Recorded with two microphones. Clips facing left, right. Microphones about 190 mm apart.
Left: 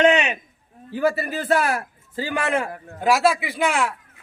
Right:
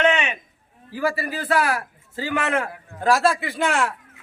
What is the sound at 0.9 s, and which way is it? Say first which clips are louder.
A man's voice: left 3 dB; 25° left (ahead or behind).